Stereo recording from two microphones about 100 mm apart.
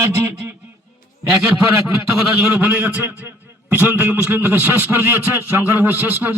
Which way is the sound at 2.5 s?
15° right (ahead or behind).